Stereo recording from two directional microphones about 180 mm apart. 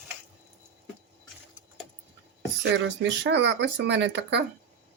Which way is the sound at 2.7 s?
80° right.